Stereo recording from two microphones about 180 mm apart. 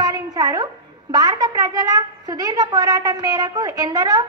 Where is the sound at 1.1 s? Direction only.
20° right (ahead or behind).